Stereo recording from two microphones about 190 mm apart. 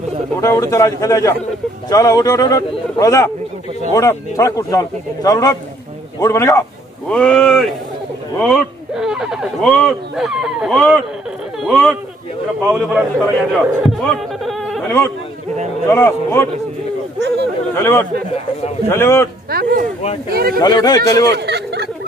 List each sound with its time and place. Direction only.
0.4 s a man's voice: 15° left (ahead or behind)
7.1 s a man's voice: 5° left (ahead or behind)
17.7 s speech: 10° left (ahead or behind)
19.5 s speech: 50° right (ahead or behind)
20.6 s a man's voice: 20° left (ahead or behind)
21.3 s a sound: 60° right (ahead or behind)